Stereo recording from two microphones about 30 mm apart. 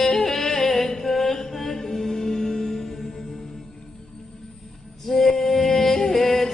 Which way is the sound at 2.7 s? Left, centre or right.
Centre.